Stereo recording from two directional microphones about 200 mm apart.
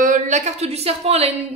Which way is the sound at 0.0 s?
40° right (ahead or behind).